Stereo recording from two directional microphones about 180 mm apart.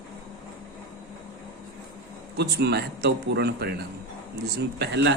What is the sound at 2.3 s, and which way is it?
Speech, 65° right (ahead or behind).